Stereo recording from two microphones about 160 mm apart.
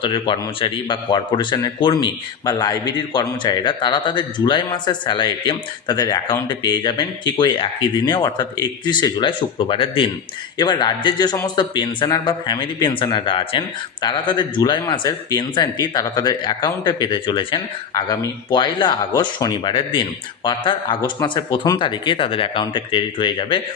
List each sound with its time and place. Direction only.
0.0 s a man's voice: 30° left (ahead or behind)